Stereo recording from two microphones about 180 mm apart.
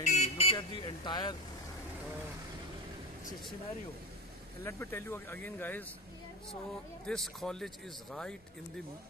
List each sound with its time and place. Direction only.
0.0 s vehicle: 40° left (ahead or behind)
4.6 s speech: 15° left (ahead or behind)
7.1 s speech: centre (ahead or behind)